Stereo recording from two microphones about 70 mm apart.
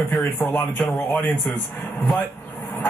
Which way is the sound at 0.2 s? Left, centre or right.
Left.